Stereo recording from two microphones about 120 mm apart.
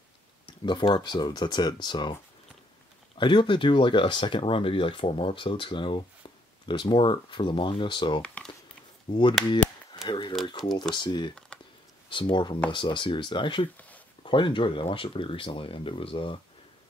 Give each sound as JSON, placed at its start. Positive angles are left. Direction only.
{"t": 0.7, "sound": "speech", "side_deg": 40}
{"t": 3.2, "sound": "speech", "side_deg": 40}
{"t": 9.1, "sound": "speech", "side_deg": 60}
{"t": 10.0, "sound": "speech", "side_deg": 40}
{"t": 13.7, "sound": "a sound", "side_deg": 15}
{"t": 14.2, "sound": "speech", "side_deg": 45}